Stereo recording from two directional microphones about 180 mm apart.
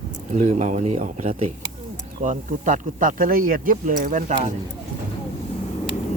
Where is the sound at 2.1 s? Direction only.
45° right (ahead or behind).